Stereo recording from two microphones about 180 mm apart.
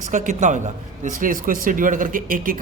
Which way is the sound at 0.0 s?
45° right (ahead or behind).